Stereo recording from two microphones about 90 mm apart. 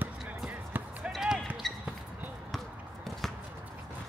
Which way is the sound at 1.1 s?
5° right (ahead or behind).